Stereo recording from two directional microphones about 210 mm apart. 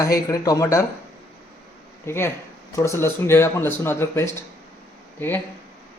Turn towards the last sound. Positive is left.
turn(degrees=10)  # may be behind; listen again after turning